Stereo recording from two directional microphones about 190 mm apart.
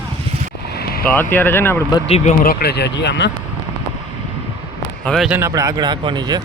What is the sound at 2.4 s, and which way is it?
Speech, 50° left (ahead or behind).